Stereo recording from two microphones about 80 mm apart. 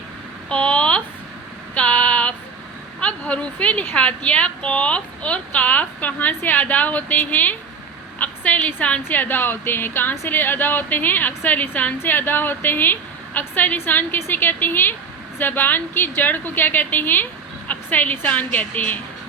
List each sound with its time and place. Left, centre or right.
0.5 s a sound: centre
1.7 s female singing: centre
3.0 s a woman's voice: centre